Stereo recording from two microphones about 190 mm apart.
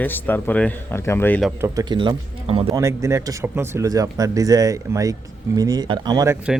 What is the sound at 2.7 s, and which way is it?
Speech, 15° right (ahead or behind).